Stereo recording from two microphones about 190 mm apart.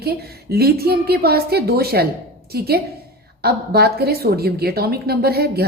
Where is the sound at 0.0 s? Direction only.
55° right (ahead or behind).